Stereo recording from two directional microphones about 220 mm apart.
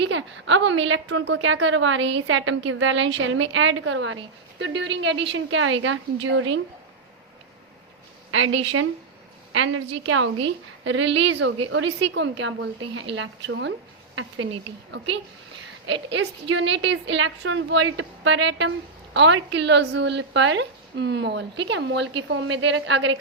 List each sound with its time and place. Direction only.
0.0 s a woman's voice: 55° right (ahead or behind)
8.5 s a woman's voice: 65° right (ahead or behind)
14.9 s a woman's voice: 50° right (ahead or behind)